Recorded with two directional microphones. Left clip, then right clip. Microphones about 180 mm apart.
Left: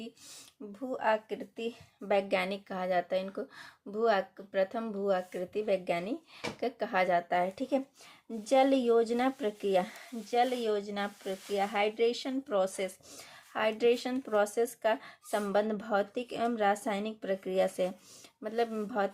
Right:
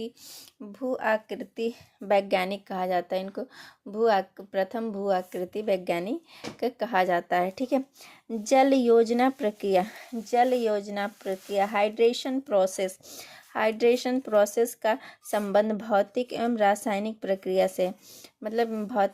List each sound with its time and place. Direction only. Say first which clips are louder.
0.7 s speech: right 4 dB; 35° right (ahead or behind)